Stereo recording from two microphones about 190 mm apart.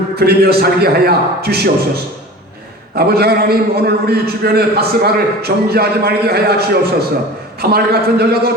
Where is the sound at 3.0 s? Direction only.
55° right (ahead or behind).